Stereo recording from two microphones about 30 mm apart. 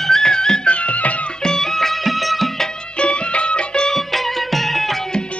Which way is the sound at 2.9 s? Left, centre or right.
Left.